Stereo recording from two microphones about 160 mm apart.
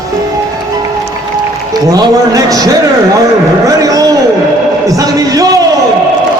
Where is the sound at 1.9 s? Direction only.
20° right (ahead or behind).